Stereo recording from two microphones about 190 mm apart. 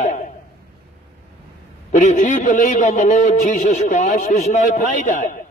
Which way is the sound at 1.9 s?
40° left (ahead or behind).